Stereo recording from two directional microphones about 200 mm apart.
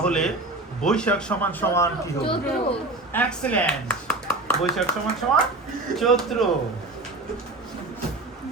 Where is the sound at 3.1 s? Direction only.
5° left (ahead or behind).